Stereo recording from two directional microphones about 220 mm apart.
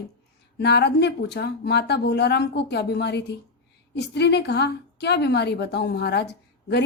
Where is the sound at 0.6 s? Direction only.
50° left (ahead or behind).